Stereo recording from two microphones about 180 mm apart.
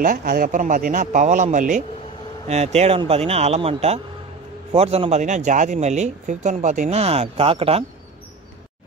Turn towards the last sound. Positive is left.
turn(degrees=-30)  # may be behind; listen again after turning